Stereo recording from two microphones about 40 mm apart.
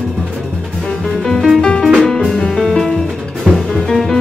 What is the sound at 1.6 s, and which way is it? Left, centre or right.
Music, left.